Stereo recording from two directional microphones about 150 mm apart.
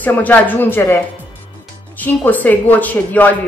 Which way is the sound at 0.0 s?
10° left (ahead or behind).